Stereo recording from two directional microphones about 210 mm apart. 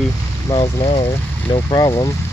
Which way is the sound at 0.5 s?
25° left (ahead or behind).